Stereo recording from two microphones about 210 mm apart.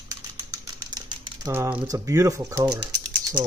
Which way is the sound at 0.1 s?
15° right (ahead or behind).